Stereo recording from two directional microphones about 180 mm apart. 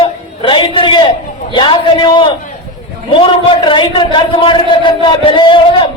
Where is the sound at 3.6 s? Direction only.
25° left (ahead or behind).